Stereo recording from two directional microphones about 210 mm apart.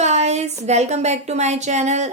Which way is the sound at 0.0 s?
30° right (ahead or behind).